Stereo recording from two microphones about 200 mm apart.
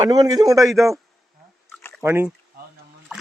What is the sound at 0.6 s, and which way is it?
Speech, centre (ahead or behind).